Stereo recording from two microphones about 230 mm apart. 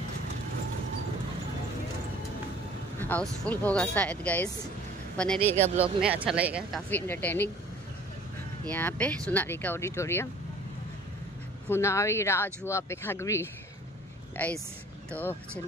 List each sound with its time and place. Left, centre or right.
3.0 s speech: centre
5.4 s speech: right
5.8 s speech: centre
6.9 s speech: centre
8.6 s speech: centre
11.7 s speech: centre